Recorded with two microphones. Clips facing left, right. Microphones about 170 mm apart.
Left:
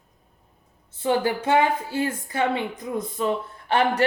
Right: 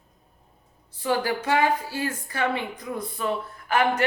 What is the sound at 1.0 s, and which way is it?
A woman's voice, 25° left (ahead or behind).